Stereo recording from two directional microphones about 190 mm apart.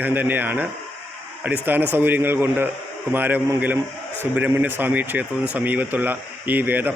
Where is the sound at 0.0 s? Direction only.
10° right (ahead or behind).